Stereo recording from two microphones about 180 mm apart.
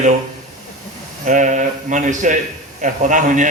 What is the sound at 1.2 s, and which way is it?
Speech, 45° right (ahead or behind).